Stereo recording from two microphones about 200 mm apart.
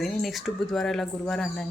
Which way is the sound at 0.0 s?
Centre (ahead or behind).